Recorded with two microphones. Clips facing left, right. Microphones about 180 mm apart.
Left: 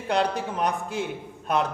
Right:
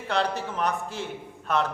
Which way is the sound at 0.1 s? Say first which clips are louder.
Left 2 dB; 15° left (ahead or behind).